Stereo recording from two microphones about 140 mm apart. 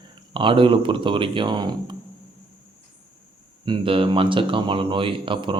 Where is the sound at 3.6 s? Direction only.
40° right (ahead or behind).